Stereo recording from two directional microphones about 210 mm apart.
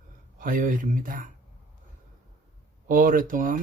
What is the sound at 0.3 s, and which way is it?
Speech, 40° right (ahead or behind).